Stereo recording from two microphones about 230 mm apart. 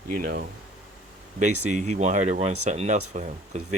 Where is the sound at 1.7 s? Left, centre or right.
Right.